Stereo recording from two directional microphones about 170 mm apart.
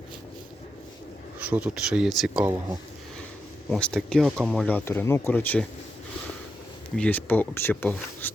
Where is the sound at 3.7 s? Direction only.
5° left (ahead or behind).